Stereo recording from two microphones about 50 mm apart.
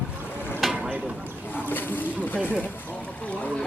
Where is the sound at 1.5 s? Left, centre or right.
Left.